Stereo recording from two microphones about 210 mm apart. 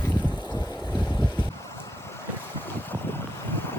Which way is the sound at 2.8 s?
10° left (ahead or behind).